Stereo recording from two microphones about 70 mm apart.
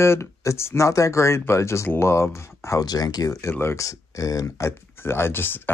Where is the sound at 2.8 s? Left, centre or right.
Left.